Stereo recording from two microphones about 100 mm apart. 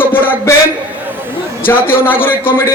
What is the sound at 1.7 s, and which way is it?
Speech, 20° left (ahead or behind).